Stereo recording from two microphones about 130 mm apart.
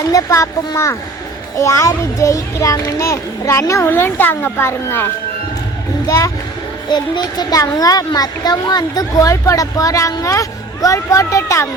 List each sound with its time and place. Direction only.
0.1 s a child's voice: 25° left (ahead or behind)